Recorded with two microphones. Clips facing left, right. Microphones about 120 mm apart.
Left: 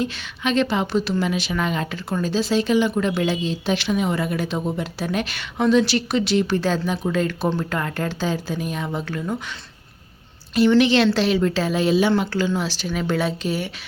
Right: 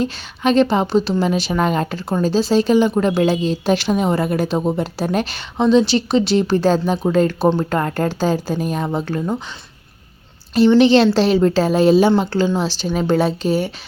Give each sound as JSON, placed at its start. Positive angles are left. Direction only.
{"t": 0.0, "sound": "a woman's voice", "side_deg": -35}
{"t": 10.5, "sound": "a woman's voice", "side_deg": -30}